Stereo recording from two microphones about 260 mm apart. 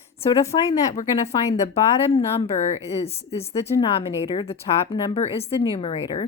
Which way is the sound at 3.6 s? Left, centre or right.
Left.